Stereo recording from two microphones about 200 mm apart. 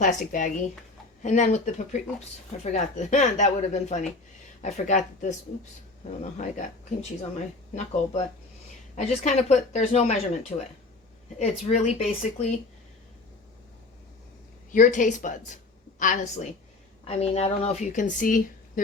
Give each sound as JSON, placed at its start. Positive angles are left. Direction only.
{"t": 0.0, "sound": "a woman's voice", "side_deg": 40}
{"t": 14.7, "sound": "a woman's voice", "side_deg": 40}